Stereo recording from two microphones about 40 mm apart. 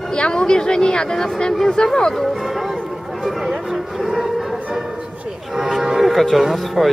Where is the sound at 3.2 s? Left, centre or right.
Centre.